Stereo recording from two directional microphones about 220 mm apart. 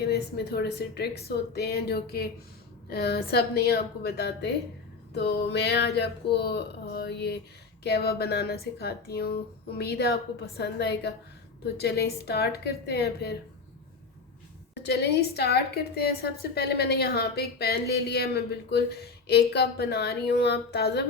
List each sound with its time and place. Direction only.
0.0 s a woman's voice: 45° left (ahead or behind)
14.8 s a woman's voice: 50° left (ahead or behind)